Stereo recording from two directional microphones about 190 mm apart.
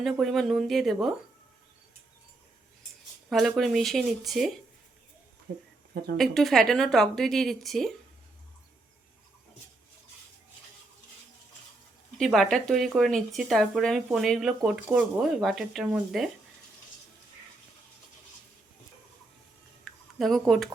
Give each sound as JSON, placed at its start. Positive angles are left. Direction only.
{"t": 0.0, "sound": "speech", "side_deg": 0}
{"t": 3.2, "sound": "speech", "side_deg": 0}
{"t": 5.5, "sound": "speech", "side_deg": -50}
{"t": 6.1, "sound": "speech", "side_deg": 0}
{"t": 12.1, "sound": "speech", "side_deg": 0}
{"t": 19.8, "sound": "a sound", "side_deg": 0}